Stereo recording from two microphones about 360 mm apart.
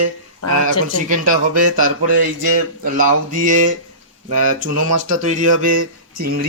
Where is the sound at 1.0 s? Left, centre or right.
Right.